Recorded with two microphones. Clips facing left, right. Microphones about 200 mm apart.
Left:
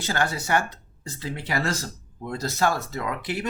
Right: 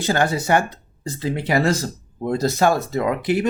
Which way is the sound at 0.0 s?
15° right (ahead or behind).